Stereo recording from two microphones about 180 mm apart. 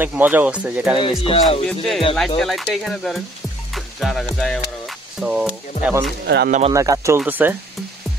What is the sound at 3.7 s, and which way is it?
Music, centre (ahead or behind).